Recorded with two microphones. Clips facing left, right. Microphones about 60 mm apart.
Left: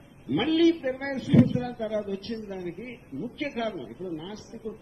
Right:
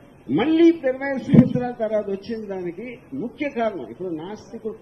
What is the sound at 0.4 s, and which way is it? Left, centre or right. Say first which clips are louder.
A woman's voice: right 7 dB; right.